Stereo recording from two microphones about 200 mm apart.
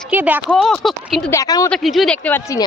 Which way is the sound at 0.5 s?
Centre (ahead or behind).